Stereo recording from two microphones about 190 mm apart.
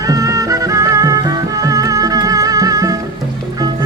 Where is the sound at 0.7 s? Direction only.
15° right (ahead or behind).